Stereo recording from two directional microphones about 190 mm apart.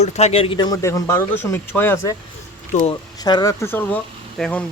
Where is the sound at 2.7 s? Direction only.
40° left (ahead or behind).